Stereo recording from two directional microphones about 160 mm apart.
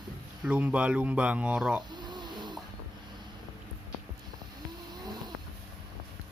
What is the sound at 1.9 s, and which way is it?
Snake, 25° right (ahead or behind).